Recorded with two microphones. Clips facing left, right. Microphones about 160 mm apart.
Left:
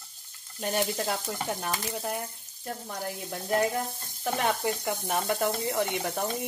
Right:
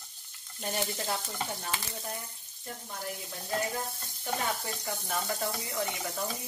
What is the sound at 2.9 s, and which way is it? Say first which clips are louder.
Speech: left 3 dB; 75° left (ahead or behind).